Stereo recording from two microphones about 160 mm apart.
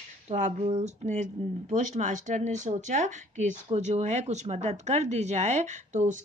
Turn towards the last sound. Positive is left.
turn(degrees=-50)  # may be behind; listen again after turning